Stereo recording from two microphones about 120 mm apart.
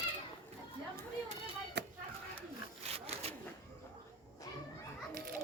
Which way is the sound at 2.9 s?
55° right (ahead or behind).